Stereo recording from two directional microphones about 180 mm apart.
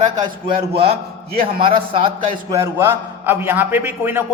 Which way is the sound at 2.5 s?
15° right (ahead or behind).